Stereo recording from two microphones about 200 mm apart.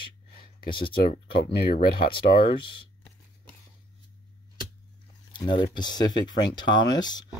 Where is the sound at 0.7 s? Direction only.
25° left (ahead or behind).